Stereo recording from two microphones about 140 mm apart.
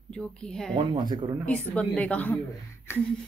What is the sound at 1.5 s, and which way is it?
Speech, 10° left (ahead or behind).